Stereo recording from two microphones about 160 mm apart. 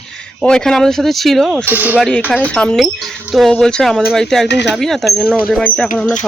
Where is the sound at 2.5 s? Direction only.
5° left (ahead or behind).